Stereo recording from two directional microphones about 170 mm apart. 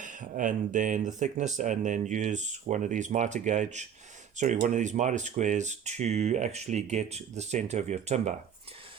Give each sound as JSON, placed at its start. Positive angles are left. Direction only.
{"t": 0.0, "sound": "speech", "side_deg": -50}